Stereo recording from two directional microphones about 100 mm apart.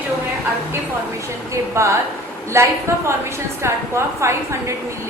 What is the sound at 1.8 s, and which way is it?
A woman's voice, 30° right (ahead or behind).